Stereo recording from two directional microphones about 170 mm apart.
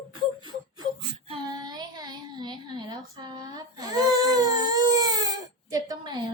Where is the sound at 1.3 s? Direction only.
25° right (ahead or behind).